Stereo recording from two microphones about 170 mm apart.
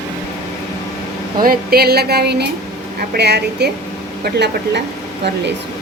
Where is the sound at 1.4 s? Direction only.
60° right (ahead or behind); by 3.6 s 75° right (ahead or behind).